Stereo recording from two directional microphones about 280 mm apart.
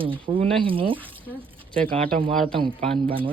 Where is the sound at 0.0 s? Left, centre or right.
Centre.